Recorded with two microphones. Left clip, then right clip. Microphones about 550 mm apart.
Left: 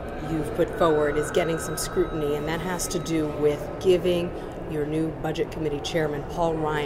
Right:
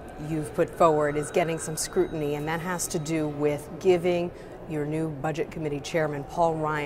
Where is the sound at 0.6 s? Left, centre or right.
Right.